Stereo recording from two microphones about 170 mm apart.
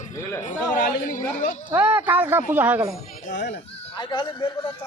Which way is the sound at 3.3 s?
90° left.